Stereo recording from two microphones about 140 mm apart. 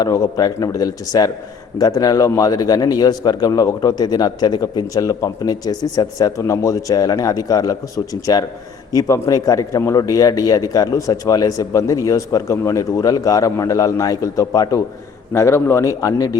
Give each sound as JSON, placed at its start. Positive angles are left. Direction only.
{"t": 0.0, "sound": "a man's voice", "side_deg": 30}